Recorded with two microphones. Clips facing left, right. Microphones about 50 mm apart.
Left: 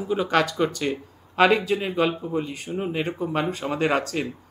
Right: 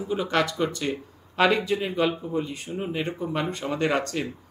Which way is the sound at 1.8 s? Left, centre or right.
Centre.